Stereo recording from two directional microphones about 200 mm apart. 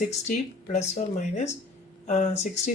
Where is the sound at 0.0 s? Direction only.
35° left (ahead or behind).